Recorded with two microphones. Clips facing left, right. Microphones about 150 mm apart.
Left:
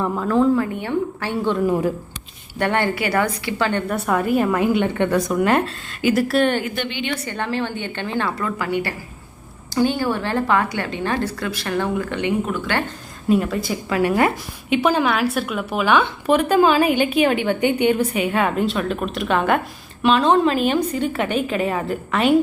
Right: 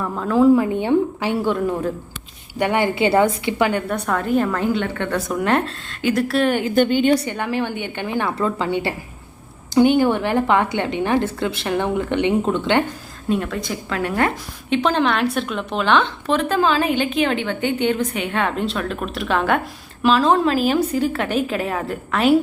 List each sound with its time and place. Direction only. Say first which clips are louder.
0.2 s a woman's voice: right 4 dB; 5° right (ahead or behind)
2.6 s a woman's voice: right 2 dB; 15° right (ahead or behind)
3.7 s a woman's voice: right 1 dB; 10° right (ahead or behind)
3.9 s a woman's voice: left 1 dB; 5° left (ahead or behind)
5.1 s a woman's voice: even; centre (ahead or behind)
6.7 s a woman's voice: right 10 dB; 45° right (ahead or behind)
7.3 s a woman's voice: right 1 dB; 15° right (ahead or behind)
8.4 s a woman's voice: right 2 dB; 25° right (ahead or behind)
13.2 s a woman's voice: left 3 dB; 5° left (ahead or behind)